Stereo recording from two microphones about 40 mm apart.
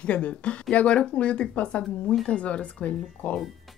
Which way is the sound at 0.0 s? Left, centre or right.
Left.